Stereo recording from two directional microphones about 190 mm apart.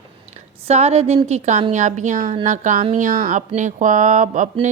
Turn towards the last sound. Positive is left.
turn(degrees=-40)  # may be behind; listen again after turning